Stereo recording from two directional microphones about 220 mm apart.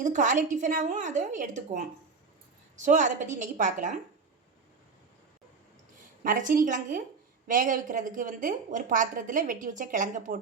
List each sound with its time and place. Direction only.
0.0 s a woman's voice: 35° right (ahead or behind)
6.2 s a woman's voice: 35° right (ahead or behind)